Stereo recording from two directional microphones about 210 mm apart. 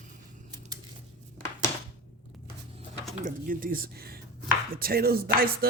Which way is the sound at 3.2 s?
40° right (ahead or behind).